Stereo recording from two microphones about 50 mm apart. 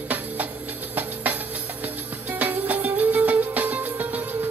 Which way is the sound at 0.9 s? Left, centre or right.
Right.